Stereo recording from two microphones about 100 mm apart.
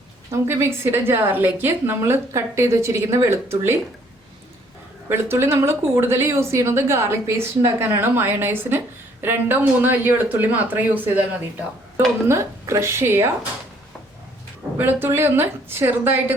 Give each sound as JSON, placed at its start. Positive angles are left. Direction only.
{"t": 0.3, "sound": "a woman's voice", "side_deg": -25}
{"t": 5.0, "sound": "a woman's voice", "side_deg": -25}
{"t": 12.3, "sound": "a woman's voice", "side_deg": -30}
{"t": 14.8, "sound": "a woman's voice", "side_deg": -20}